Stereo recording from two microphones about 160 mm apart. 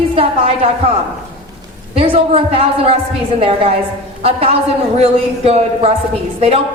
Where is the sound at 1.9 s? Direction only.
35° right (ahead or behind).